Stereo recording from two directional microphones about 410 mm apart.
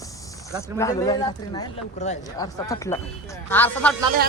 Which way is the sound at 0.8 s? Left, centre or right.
Centre.